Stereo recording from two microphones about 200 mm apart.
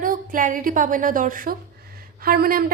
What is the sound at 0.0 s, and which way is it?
A woman's voice, 45° right (ahead or behind).